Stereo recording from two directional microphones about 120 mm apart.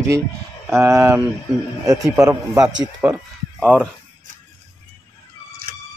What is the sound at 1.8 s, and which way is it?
A man's voice, 30° right (ahead or behind).